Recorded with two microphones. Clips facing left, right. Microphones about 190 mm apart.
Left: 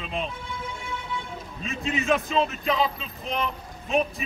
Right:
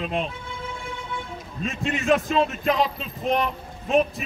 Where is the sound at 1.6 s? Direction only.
Centre (ahead or behind).